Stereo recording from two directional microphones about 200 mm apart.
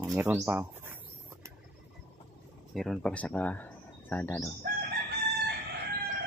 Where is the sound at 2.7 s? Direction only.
Centre (ahead or behind).